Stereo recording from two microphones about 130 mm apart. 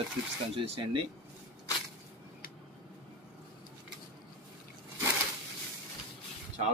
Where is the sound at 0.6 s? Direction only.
50° right (ahead or behind).